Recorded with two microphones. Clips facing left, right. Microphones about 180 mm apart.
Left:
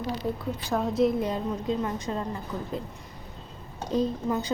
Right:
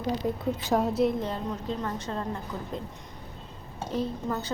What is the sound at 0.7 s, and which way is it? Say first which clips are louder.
Speech: right 3 dB; 20° right (ahead or behind).